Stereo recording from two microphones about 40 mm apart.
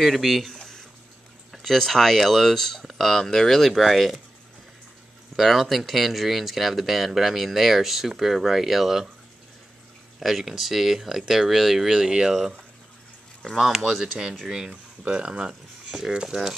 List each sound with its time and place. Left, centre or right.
0.0 s speech: centre
1.6 s speech: centre
5.3 s speech: centre
10.2 s speech: centre
12.1 s speech: centre
13.6 s speech: centre
15.0 s speech: right